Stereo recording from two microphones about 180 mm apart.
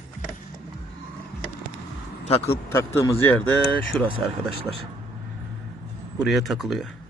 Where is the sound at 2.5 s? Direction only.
15° left (ahead or behind).